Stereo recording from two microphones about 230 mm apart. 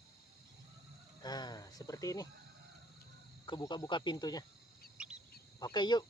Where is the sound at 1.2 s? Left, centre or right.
Centre.